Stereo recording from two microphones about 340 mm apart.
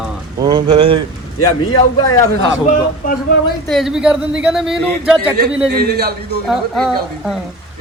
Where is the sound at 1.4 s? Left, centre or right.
Centre.